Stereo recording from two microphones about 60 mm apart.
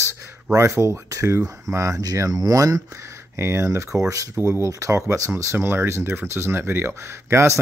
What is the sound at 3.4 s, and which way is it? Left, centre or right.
Speech, right.